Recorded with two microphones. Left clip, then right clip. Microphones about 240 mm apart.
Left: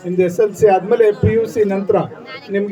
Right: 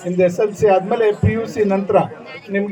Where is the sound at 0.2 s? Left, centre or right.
Centre.